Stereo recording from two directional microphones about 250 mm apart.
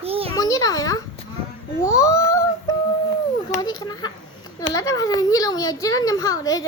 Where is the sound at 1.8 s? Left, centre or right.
Centre.